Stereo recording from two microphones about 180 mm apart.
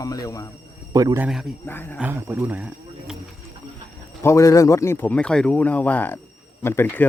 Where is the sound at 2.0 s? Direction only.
10° right (ahead or behind).